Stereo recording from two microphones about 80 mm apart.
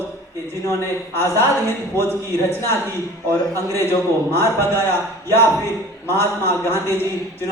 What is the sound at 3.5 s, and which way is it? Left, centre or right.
A man's voice, left.